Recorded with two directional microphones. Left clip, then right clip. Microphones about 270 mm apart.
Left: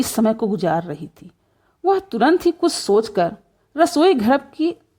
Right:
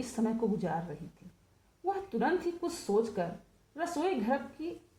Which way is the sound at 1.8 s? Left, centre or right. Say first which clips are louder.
Left 15 dB; left.